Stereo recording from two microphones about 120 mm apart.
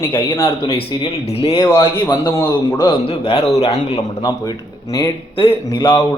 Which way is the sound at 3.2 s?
50° left (ahead or behind).